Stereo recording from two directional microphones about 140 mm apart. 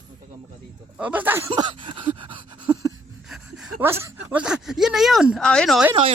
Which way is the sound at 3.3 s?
Centre (ahead or behind).